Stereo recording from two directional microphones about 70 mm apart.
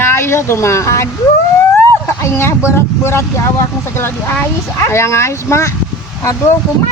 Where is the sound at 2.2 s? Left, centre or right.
Left.